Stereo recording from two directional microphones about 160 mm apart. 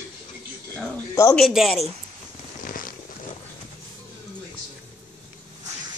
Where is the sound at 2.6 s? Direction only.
60° left (ahead or behind).